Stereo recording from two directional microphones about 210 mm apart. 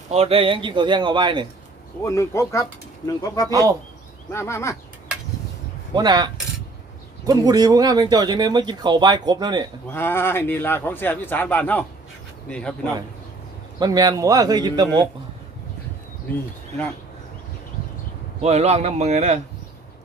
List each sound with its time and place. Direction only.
0.1 s speech: 30° right (ahead or behind)
2.0 s speech: 15° left (ahead or behind)
3.5 s speech: 15° right (ahead or behind)
4.3 s speech: 15° left (ahead or behind)
5.9 s speech: 20° right (ahead or behind)
9.9 s speech: 10° left (ahead or behind)
13.7 s speech: 20° right (ahead or behind)
18.4 s speech: 30° right (ahead or behind)